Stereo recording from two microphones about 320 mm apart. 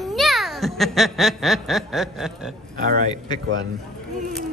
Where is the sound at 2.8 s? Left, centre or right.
Right.